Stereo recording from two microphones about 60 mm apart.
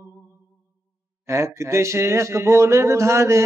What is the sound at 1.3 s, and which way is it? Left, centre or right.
Mantra, right.